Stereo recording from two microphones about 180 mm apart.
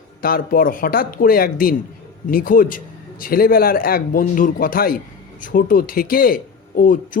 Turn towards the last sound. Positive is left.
turn(degrees=50)  # may be behind; listen again after turning